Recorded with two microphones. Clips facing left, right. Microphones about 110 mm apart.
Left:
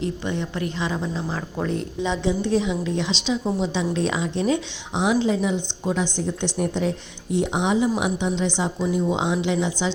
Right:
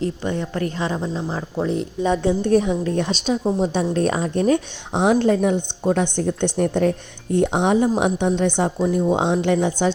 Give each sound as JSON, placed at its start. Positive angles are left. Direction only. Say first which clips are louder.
{"t": 0.0, "sound": "a woman's voice", "louder": "right 3 dB", "side_deg": -40}
{"t": 1.0, "sound": "a woman's voice", "louder": "right 2 dB", "side_deg": -30}
{"t": 2.0, "sound": "a woman's voice", "louder": "right 5 dB", "side_deg": -50}